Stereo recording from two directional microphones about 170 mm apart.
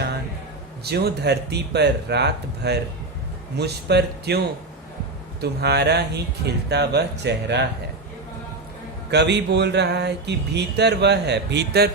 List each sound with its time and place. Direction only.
0.9 s speech: 70° right (ahead or behind); by 7.6 s 90° right
9.0 s speech: 90° right; by 11.9 s 75° right (ahead or behind)